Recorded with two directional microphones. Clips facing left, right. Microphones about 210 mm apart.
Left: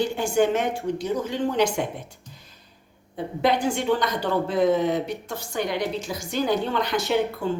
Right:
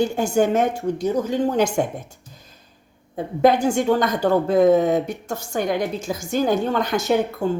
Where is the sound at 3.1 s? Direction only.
45° right (ahead or behind).